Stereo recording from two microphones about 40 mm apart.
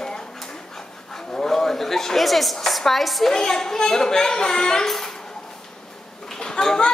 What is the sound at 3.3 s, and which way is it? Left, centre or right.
A woman's voice, centre.